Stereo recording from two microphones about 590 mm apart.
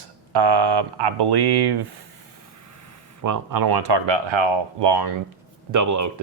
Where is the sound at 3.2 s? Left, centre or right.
Right.